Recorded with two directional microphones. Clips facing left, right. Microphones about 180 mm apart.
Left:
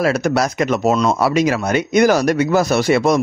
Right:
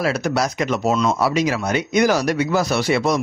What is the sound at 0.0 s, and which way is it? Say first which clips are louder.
Speech: left 4 dB; 50° left (ahead or behind).